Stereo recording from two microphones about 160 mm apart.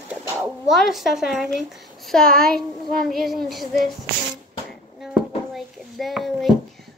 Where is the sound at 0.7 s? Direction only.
Centre (ahead or behind).